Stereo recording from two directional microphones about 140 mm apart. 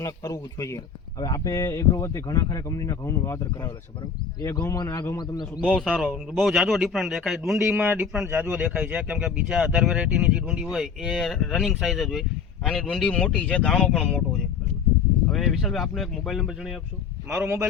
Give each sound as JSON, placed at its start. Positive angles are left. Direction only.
{"t": 0.0, "sound": "speech", "side_deg": 25}
{"t": 4.8, "sound": "speech", "side_deg": 30}
{"t": 5.5, "sound": "speech", "side_deg": 0}
{"t": 7.6, "sound": "speech", "side_deg": -15}
{"t": 17.3, "sound": "speech", "side_deg": -15}